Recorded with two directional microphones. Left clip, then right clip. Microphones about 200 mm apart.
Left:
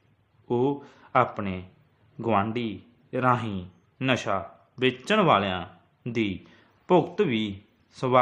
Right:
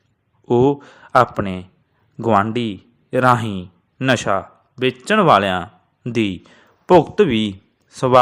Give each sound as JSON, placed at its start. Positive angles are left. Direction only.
{"t": 0.4, "sound": "a man's voice", "side_deg": -40}
{"t": 4.7, "sound": "speech", "side_deg": -25}